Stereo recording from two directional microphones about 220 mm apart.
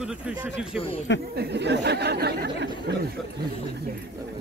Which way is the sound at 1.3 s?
50° right (ahead or behind).